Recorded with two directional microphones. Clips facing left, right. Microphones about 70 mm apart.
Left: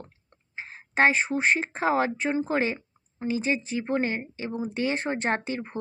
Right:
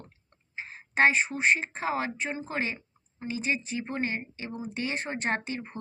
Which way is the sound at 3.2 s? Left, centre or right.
Left.